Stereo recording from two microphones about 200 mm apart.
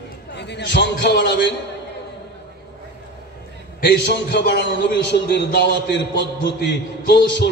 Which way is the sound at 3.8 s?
60° left (ahead or behind).